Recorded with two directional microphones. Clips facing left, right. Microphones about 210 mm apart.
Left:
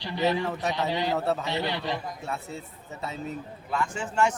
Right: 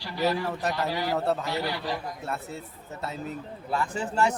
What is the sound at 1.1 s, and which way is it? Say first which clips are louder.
Speech: right 3 dB; centre (ahead or behind).